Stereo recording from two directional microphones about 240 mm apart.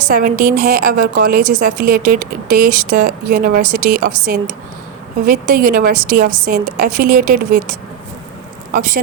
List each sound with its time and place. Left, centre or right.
0.1 s a woman's voice: right